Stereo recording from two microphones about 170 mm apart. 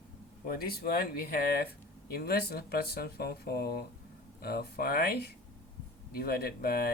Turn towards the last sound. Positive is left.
turn(degrees=65)  # may be behind; listen again after turning